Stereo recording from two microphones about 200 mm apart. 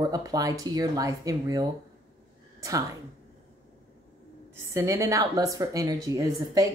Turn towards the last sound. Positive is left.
turn(degrees=-20)  # may be behind; listen again after turning